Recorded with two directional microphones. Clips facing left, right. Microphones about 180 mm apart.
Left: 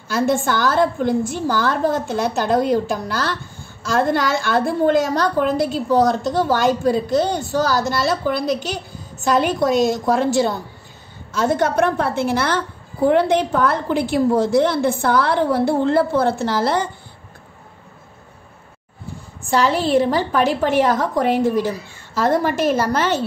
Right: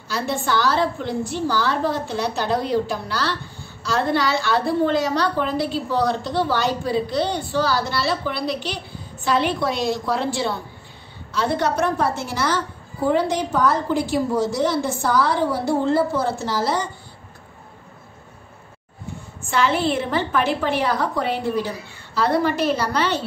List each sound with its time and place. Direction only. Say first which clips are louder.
0.1 s a woman's voice: left 5 dB; 50° left (ahead or behind)
19.5 s a woman's voice: left 4 dB; 40° left (ahead or behind)